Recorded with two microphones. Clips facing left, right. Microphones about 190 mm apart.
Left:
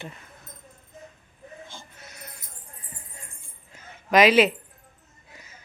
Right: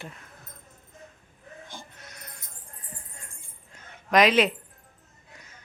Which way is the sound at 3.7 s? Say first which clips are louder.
Left 2 dB; 5° left (ahead or behind).